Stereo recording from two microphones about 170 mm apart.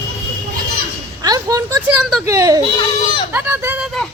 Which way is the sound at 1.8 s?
5° right (ahead or behind).